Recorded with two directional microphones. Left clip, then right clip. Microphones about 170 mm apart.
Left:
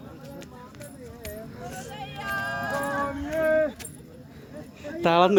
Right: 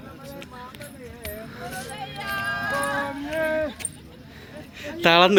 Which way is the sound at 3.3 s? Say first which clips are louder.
Left 2 dB; 50° right (ahead or behind).